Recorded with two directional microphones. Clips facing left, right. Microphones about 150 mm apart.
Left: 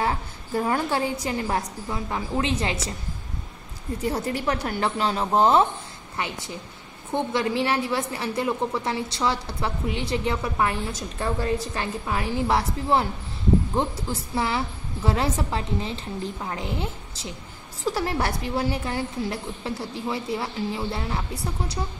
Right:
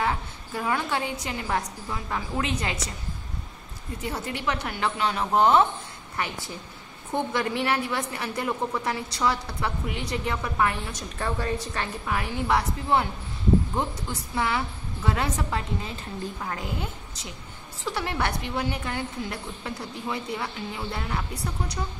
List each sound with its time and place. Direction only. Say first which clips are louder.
0.0 s a woman's voice: left 1 dB; 35° left (ahead or behind)
1.9 s a woman's voice: left 3 dB; 20° left (ahead or behind)
4.0 s a woman's voice: left 4 dB; 35° left (ahead or behind)